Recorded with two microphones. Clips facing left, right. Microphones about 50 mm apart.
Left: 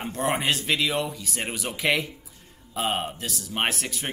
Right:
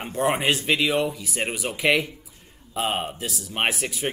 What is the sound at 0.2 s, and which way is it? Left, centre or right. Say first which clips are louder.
Speech: right 3 dB; centre.